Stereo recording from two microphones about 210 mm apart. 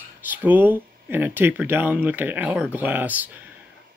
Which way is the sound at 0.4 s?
10° right (ahead or behind).